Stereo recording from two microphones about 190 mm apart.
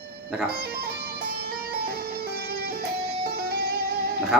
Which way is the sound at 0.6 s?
55° right (ahead or behind).